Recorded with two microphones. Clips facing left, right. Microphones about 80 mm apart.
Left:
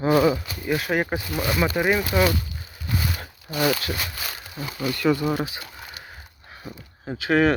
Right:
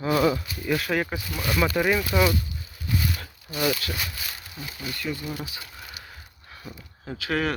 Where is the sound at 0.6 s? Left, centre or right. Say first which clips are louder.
Left 2 dB; centre.